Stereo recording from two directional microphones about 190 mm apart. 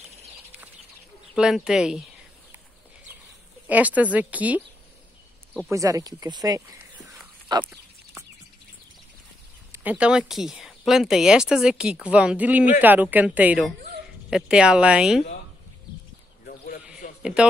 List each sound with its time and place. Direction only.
1.3 s speech: 5° right (ahead or behind)
3.6 s a woman's voice: 10° right (ahead or behind)
5.7 s speech: 15° right (ahead or behind)
7.4 s goat: 20° right (ahead or behind)
9.7 s a woman's voice: 10° right (ahead or behind)
16.4 s sheep: 50° left (ahead or behind)
17.2 s speech: 5° right (ahead or behind)